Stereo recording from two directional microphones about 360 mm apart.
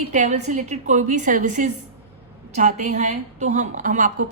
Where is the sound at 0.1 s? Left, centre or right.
Centre.